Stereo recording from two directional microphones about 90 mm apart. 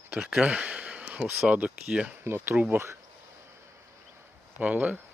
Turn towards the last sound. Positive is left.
turn(degrees=-15)  # may be behind; listen again after turning